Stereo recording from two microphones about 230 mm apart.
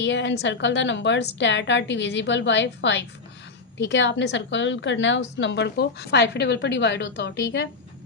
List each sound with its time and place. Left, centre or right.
0.0 s a woman's voice: left